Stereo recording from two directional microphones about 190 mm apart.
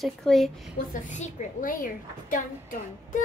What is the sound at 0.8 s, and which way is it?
A woman's voice, 40° left (ahead or behind).